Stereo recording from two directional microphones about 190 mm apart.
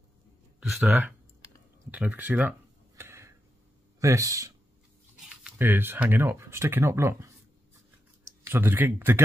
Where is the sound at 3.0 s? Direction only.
15° right (ahead or behind).